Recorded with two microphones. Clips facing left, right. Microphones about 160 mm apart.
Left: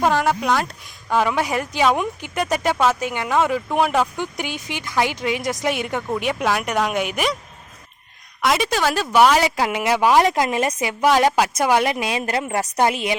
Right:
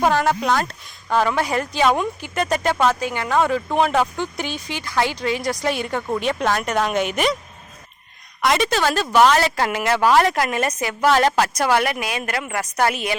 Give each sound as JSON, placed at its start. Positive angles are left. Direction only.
{"t": 0.0, "sound": "a woman's voice", "side_deg": 0}
{"t": 4.2, "sound": "a woman's voice", "side_deg": 15}
{"t": 8.4, "sound": "a woman's voice", "side_deg": 0}